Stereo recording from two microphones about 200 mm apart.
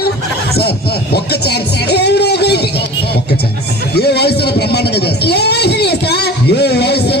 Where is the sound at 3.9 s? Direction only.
55° left (ahead or behind).